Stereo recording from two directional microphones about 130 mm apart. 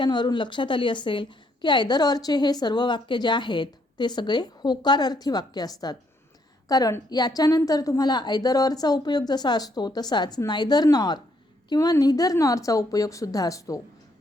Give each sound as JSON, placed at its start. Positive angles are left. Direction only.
{"t": 0.0, "sound": "a woman's voice", "side_deg": 35}